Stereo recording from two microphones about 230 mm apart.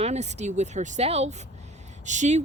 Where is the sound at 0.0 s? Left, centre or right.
Right.